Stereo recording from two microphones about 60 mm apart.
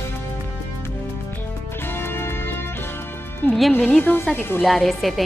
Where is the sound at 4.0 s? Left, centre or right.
Left.